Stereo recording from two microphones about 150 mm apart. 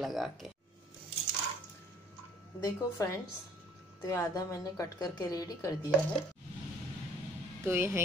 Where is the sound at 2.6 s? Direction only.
20° left (ahead or behind).